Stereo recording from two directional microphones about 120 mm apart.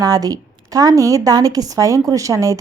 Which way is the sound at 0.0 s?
30° right (ahead or behind).